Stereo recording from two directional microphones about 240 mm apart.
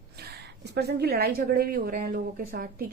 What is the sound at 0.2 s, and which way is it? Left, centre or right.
A woman's voice, right.